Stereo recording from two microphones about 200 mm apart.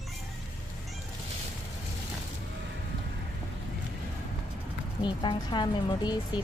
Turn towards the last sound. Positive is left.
turn(degrees=20)  # may be behind; listen again after turning